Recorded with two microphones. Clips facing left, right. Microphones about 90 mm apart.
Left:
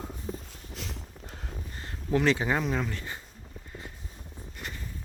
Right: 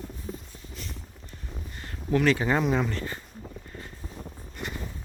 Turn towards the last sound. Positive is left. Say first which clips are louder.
# right 5 dB
turn(degrees=10)  # may be behind; listen again after turning